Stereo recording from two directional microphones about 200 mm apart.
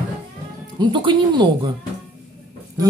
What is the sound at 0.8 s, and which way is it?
Speech, 25° right (ahead or behind).